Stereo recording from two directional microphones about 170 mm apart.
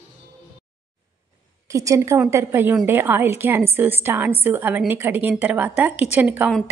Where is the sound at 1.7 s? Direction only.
20° right (ahead or behind).